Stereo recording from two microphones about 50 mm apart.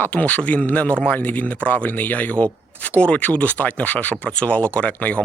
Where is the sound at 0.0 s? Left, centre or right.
Left.